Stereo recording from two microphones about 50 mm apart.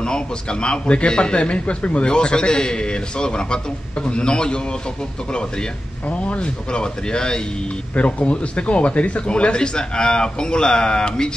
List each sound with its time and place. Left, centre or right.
0.0 s a man's voice: centre
6.0 s speech: left